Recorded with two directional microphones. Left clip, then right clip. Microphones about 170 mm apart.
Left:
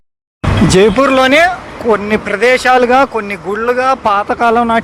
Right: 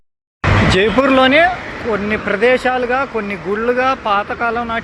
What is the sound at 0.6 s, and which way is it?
Speech, 50° left (ahead or behind).